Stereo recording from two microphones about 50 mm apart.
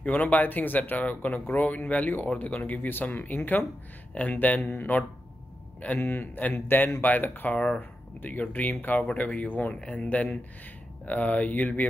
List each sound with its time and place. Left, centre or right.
0.0 s a man's voice: left
4.6 s speech: left
6.0 s speech: left
7.5 s a man's voice: left
8.2 s speech: left
9.8 s a man's voice: left